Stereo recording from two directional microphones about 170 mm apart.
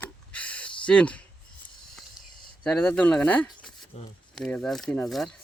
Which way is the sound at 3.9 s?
40° left (ahead or behind).